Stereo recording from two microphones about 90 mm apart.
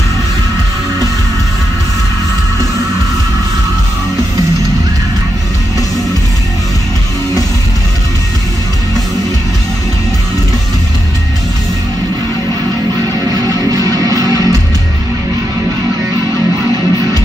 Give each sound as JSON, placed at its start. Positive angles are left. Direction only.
{"t": 13.3, "sound": "music", "side_deg": -45}